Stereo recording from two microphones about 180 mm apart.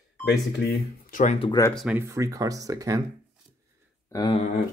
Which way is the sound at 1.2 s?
40° left (ahead or behind).